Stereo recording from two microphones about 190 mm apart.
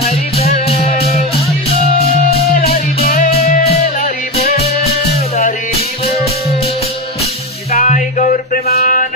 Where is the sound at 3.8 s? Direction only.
45° left (ahead or behind).